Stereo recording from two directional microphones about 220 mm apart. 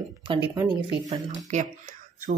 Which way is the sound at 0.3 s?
25° right (ahead or behind).